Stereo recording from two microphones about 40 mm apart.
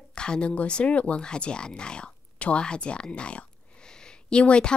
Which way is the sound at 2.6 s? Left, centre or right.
Left.